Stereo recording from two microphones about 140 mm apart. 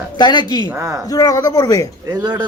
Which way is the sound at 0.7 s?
20° right (ahead or behind).